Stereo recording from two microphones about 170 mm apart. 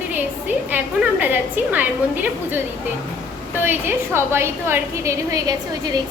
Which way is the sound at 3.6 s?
15° right (ahead or behind).